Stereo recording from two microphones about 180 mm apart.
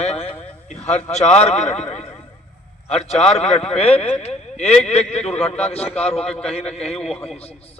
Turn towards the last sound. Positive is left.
turn(degrees=35)  # may be behind; listen again after turning